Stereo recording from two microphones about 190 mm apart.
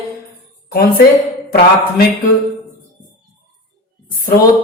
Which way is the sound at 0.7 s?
55° left (ahead or behind).